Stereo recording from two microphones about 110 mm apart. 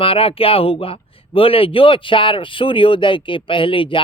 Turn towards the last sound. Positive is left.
turn(degrees=50)  # may be behind; listen again after turning